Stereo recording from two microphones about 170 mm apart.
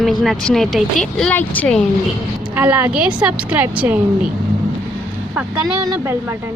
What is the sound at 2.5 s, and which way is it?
A woman's voice, 10° right (ahead or behind).